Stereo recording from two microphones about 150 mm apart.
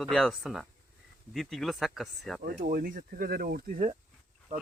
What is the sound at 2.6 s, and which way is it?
Speech, 65° right (ahead or behind).